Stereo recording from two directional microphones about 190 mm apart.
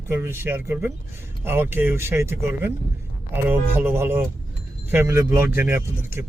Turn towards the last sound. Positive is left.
turn(degrees=-10)  # may be behind; listen again after turning